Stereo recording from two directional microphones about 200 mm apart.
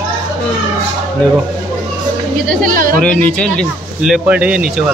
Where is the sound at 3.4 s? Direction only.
Centre (ahead or behind).